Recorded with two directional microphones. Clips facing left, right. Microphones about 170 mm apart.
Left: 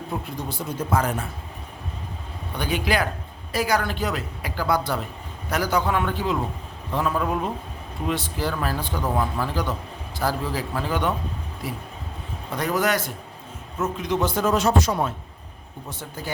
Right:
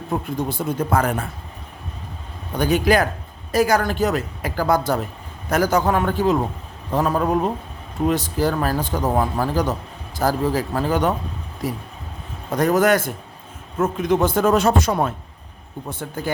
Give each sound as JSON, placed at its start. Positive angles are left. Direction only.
{"t": 0.3, "sound": "speech", "side_deg": -55}
{"t": 2.6, "sound": "a man's voice", "side_deg": -45}